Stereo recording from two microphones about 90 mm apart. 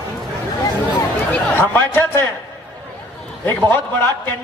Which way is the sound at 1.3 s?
20° left (ahead or behind).